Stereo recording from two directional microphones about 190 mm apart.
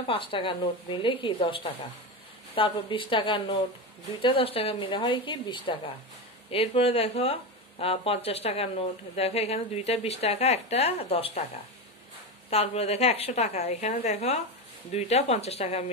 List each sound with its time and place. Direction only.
0.1 s a woman's voice: 25° left (ahead or behind)
12.4 s a woman's voice: 35° left (ahead or behind)